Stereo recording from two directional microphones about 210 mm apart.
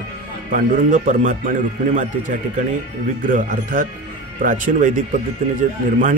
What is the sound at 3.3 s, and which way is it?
A man's voice, 40° right (ahead or behind).